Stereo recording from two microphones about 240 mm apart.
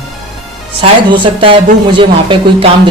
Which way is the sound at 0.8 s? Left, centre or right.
Right.